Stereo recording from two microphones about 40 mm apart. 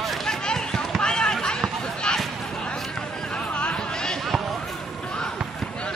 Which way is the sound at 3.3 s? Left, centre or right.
Left.